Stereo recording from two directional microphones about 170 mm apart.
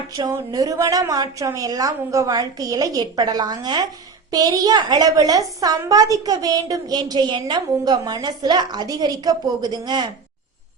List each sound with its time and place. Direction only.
0.1 s a woman's voice: 20° right (ahead or behind)